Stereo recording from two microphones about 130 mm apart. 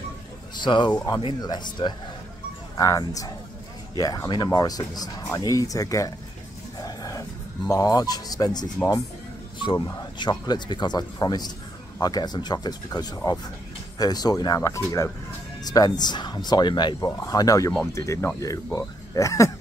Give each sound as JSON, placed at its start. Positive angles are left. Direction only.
{"t": 0.6, "sound": "speech", "side_deg": 35}